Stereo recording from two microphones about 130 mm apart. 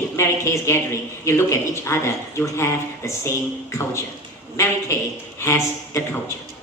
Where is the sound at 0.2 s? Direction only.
20° left (ahead or behind).